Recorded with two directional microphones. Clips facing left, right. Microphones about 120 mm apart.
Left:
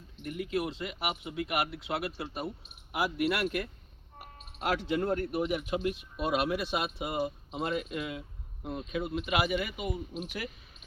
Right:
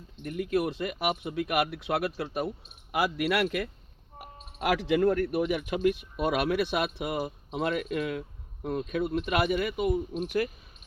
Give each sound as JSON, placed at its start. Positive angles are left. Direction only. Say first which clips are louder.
{"t": 0.3, "sound": "speech", "louder": "right 5 dB", "side_deg": -55}
{"t": 2.9, "sound": "speech", "louder": "right 3 dB", "side_deg": -90}